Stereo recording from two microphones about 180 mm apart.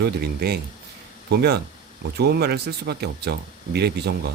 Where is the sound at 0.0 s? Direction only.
60° right (ahead or behind).